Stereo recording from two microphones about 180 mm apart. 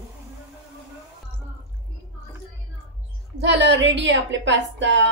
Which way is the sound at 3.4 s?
75° right (ahead or behind).